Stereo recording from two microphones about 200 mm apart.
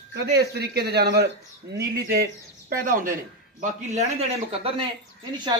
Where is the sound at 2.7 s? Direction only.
45° right (ahead or behind).